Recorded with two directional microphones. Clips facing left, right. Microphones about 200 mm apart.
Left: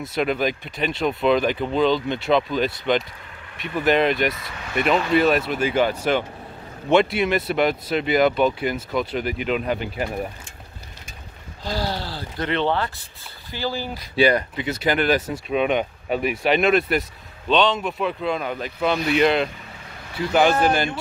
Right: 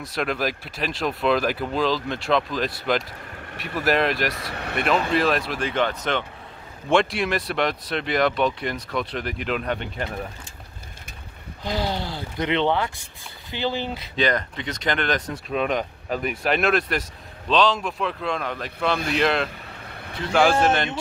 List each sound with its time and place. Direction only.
0.1 s speech: centre (ahead or behind)
4.5 s speech: 65° right (ahead or behind)
4.8 s speech: centre (ahead or behind)
11.6 s speech: 15° right (ahead or behind)
14.1 s speech: 10° left (ahead or behind)